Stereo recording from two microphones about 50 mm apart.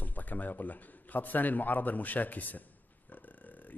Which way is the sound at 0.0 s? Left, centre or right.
Left.